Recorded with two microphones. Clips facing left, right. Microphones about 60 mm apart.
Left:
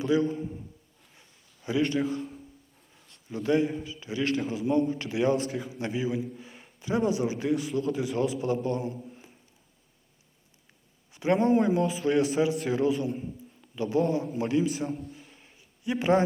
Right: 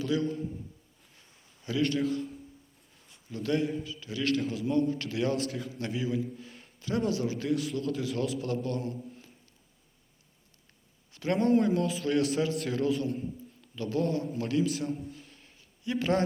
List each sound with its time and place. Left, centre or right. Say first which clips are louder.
0.0 s a man's voice: left 4 dB; centre
1.6 s a man's voice: left 2 dB; centre
3.8 s a man's voice: left 1 dB; left
11.1 s a man's voice: left 2 dB; centre
15.1 s a sound: left 1 dB; centre